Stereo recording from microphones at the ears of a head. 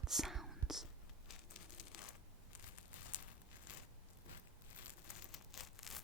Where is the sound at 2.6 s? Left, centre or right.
Left.